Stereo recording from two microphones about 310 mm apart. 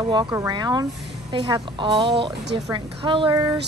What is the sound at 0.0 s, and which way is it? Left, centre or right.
A woman's voice, centre.